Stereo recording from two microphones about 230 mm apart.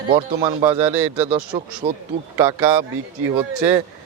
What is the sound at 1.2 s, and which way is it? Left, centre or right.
Speech, right.